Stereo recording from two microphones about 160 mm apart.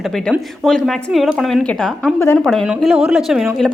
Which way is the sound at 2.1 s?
15° left (ahead or behind).